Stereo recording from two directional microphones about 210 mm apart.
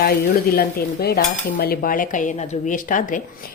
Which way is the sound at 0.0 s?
45° left (ahead or behind).